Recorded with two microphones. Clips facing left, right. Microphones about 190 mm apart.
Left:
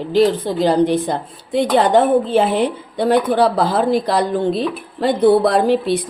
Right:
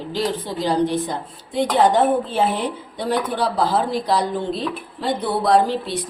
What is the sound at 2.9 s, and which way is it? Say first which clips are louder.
Speech: left 8 dB; 60° left (ahead or behind).